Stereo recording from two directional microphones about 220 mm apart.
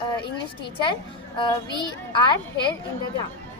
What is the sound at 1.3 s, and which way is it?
Speech, 20° left (ahead or behind).